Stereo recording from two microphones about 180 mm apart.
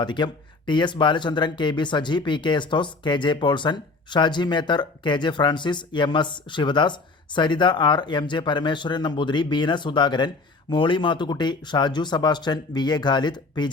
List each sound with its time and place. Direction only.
0.0 s speech: 25° left (ahead or behind)